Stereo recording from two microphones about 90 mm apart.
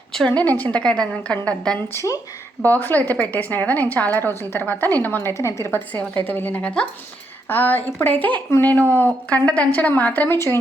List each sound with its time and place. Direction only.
0.3 s a woman's voice: 15° left (ahead or behind)
1.9 s a woman's voice: 30° left (ahead or behind)
2.6 s a woman's voice: 20° left (ahead or behind)
5.3 s a woman's voice: 35° left (ahead or behind)
5.9 s a woman's voice: 20° left (ahead or behind)